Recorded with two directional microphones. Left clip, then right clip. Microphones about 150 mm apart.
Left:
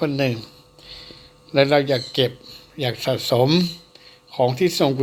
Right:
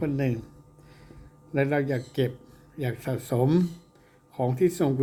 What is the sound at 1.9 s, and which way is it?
Speech, 15° left (ahead or behind).